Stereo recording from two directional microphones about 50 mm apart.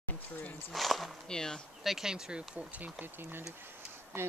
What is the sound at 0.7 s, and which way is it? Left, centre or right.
Speech, centre.